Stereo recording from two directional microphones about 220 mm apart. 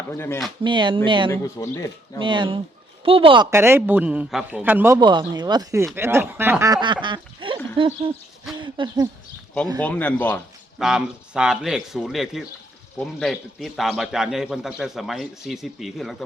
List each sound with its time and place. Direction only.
0.1 s speech: 10° left (ahead or behind)
0.6 s speech: 20° right (ahead or behind)
1.3 s speech: 15° left (ahead or behind)
2.2 s speech: 20° right (ahead or behind)
3.5 s a man's voice: 10° right (ahead or behind)
8.5 s owl: 20° right (ahead or behind)
9.8 s speech: 5° left (ahead or behind)
10.8 s a man's voice: centre (ahead or behind)